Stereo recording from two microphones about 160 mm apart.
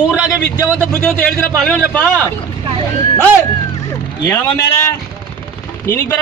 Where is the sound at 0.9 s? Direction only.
5° left (ahead or behind).